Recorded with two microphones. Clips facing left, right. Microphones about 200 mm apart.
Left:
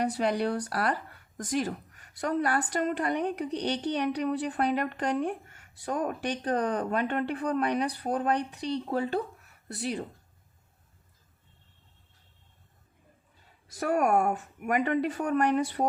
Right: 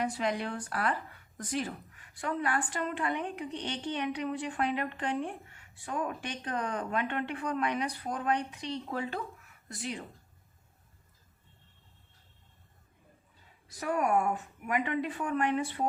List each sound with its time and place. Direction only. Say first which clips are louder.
0.0 s a woman's voice: left 5 dB; 35° left (ahead or behind)
13.7 s speech: left 4 dB; 45° left (ahead or behind)